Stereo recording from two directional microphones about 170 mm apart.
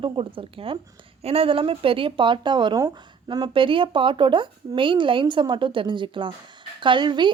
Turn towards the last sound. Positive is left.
turn(degrees=-25)  # may be behind; listen again after turning